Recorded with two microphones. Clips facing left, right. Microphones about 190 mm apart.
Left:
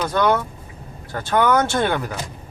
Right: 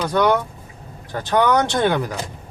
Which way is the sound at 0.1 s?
15° right (ahead or behind).